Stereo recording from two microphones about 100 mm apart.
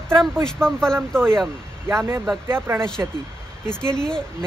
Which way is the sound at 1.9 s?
25° right (ahead or behind).